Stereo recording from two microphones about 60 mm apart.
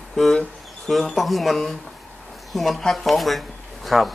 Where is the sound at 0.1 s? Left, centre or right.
Centre.